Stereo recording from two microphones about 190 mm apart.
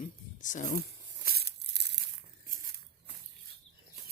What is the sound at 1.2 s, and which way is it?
Crumpling, 55° right (ahead or behind).